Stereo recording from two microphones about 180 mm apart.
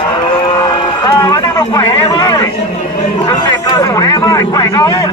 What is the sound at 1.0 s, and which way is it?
Run, 20° left (ahead or behind).